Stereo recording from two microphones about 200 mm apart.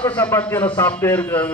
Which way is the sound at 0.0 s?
10° left (ahead or behind).